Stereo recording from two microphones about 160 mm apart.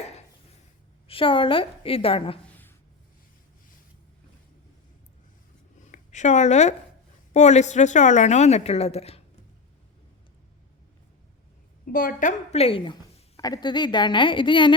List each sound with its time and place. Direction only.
1.0 s a woman's voice: 35° left (ahead or behind)
5.8 s a sound: 50° left (ahead or behind)
7.3 s a woman's voice: 45° left (ahead or behind)
11.9 s a woman's voice: 60° left (ahead or behind)
12.5 s a woman's voice: 40° left (ahead or behind)